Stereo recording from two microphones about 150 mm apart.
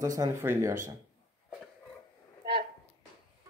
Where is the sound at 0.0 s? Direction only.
25° right (ahead or behind).